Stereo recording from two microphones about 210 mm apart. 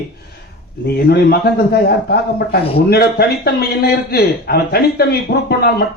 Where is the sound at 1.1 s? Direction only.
50° left (ahead or behind).